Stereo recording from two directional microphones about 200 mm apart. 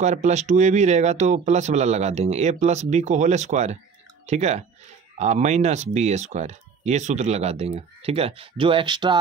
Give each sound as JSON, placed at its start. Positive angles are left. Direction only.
{"t": 0.0, "sound": "speech", "side_deg": -35}